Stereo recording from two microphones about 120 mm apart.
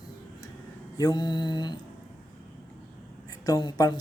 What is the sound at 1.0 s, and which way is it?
Speech, 35° left (ahead or behind).